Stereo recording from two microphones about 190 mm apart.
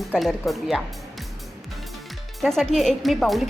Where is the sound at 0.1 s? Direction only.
Centre (ahead or behind).